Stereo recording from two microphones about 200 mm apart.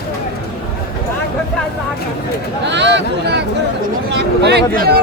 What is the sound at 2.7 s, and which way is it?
Speech, 60° right (ahead or behind).